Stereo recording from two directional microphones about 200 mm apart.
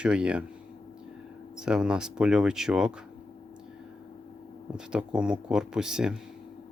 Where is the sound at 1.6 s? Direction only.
5° right (ahead or behind).